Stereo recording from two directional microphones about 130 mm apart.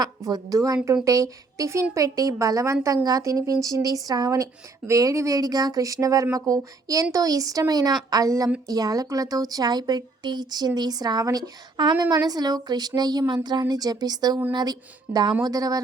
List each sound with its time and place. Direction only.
0.0 s a woman's voice: 30° right (ahead or behind)